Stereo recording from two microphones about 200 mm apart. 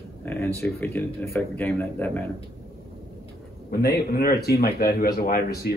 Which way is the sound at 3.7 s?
50° left (ahead or behind).